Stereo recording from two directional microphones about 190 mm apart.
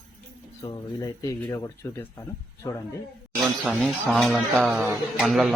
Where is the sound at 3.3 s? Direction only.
Centre (ahead or behind).